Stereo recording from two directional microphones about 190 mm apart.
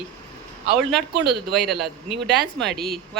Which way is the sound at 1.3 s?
Centre (ahead or behind).